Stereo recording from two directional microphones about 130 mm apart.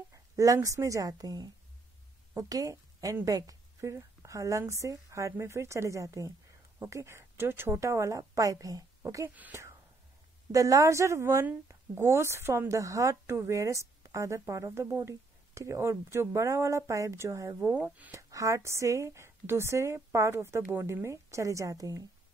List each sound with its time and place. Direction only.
0.1 s a woman's voice: 25° right (ahead or behind)
18.3 s a woman's voice: 25° right (ahead or behind)